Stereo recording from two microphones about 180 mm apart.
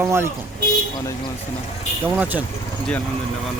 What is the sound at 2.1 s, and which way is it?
Speech, 10° right (ahead or behind).